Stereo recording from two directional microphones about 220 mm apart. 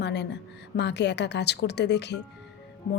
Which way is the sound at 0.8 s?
50° left (ahead or behind).